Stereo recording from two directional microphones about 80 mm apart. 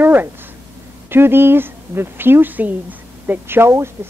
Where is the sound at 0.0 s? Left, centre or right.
Right.